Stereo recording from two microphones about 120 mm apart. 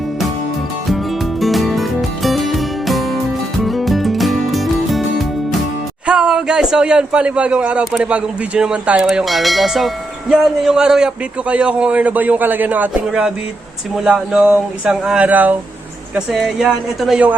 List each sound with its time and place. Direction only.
1.4 s music: centre (ahead or behind)
6.1 s a man's voice: 5° right (ahead or behind)
16.1 s speech: centre (ahead or behind)